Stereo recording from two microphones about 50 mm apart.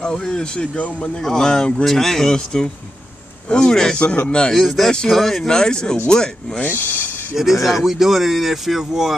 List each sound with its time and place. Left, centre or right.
0.0 s speech: centre
1.2 s speech: centre
4.0 s a man's voice: left
4.6 s speech: centre
5.5 s speech: centre
6.6 s speech: left
7.6 s speech: centre